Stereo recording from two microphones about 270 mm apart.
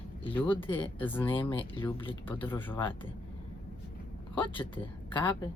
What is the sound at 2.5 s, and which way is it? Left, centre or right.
Speech, centre.